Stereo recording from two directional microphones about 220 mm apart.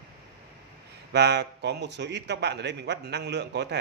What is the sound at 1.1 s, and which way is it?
A man's voice, 50° right (ahead or behind).